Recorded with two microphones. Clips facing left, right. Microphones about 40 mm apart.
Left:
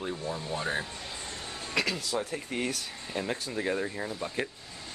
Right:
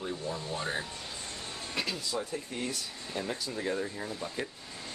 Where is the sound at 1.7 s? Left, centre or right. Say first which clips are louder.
Left 5 dB; left.